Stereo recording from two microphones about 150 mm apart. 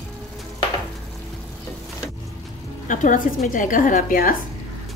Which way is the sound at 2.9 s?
60° left (ahead or behind).